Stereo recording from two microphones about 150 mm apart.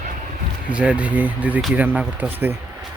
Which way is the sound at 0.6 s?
5° right (ahead or behind).